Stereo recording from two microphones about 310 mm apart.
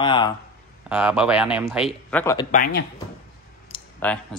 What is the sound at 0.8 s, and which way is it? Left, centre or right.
Speech, centre.